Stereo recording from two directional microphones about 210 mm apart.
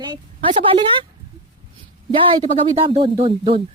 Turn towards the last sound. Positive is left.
turn(degrees=-25)  # may be behind; listen again after turning